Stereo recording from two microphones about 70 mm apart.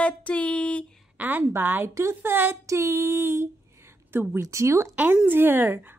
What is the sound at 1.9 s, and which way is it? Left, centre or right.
Speech, right.